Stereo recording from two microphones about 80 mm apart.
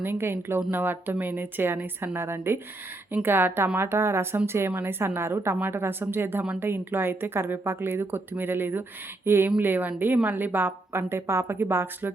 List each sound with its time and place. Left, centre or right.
0.0 s a woman's voice: right